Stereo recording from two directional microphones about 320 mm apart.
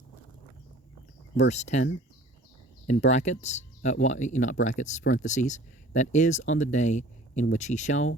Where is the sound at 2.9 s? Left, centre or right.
Left.